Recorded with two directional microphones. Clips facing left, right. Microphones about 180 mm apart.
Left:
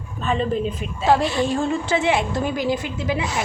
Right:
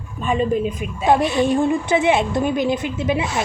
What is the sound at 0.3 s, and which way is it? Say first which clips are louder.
A woman's voice: right 3 dB; 10° right (ahead or behind).